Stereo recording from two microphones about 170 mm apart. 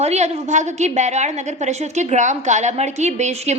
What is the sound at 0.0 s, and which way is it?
A woman's voice, 40° right (ahead or behind).